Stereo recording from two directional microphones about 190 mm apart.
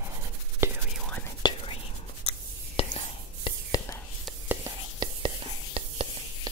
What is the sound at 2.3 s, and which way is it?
Writing, 30° left (ahead or behind).